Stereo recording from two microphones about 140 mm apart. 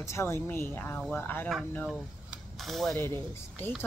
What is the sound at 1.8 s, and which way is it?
Speech, centre (ahead or behind).